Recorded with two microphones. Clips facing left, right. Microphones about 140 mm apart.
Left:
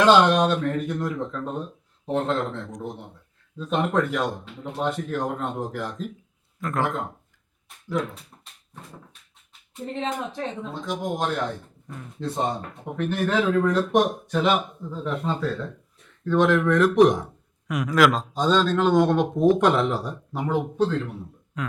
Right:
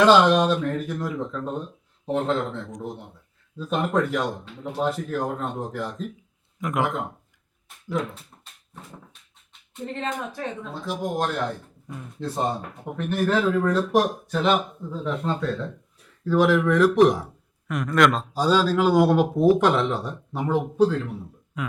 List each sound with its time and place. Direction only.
0.0 s speech: centre (ahead or behind)
6.6 s speech: 15° right (ahead or behind)
6.8 s speech: 5° right (ahead or behind)
8.7 s dog: centre (ahead or behind)
10.2 s speech: 15° left (ahead or behind)
10.6 s speech: centre (ahead or behind)